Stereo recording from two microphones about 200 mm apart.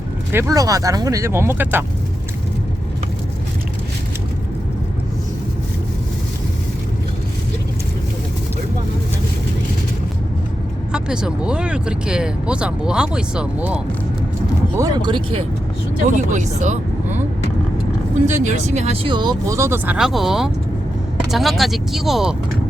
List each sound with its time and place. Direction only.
0.3 s speech: 15° right (ahead or behind)
10.9 s speech: 5° right (ahead or behind)
14.8 s speech: 20° right (ahead or behind)
16.0 s speech: 35° right (ahead or behind)
18.3 s speech: 35° right (ahead or behind); by 22.4 s centre (ahead or behind)